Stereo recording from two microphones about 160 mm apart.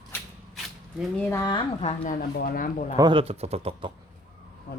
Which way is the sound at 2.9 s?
30° right (ahead or behind).